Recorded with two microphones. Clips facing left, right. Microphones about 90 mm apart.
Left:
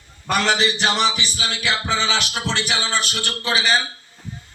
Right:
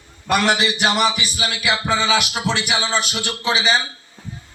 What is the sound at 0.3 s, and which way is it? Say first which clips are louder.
Speech: right 2 dB; 10° right (ahead or behind).